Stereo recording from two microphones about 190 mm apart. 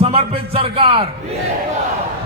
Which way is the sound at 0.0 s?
30° right (ahead or behind).